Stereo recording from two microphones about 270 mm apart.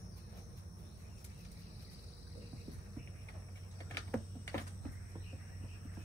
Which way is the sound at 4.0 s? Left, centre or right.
Centre.